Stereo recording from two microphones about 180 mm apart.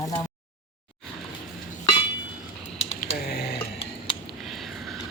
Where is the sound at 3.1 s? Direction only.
60° left (ahead or behind).